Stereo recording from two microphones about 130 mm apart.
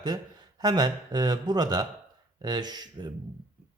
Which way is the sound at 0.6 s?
35° right (ahead or behind).